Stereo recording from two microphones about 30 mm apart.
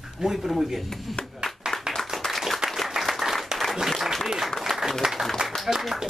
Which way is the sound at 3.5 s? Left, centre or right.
Right.